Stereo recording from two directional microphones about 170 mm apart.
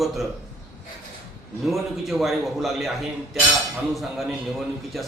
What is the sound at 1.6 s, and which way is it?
Speech, centre (ahead or behind).